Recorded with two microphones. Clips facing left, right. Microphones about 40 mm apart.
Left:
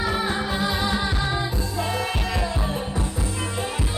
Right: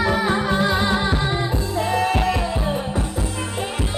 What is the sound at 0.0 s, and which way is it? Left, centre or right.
Music, right.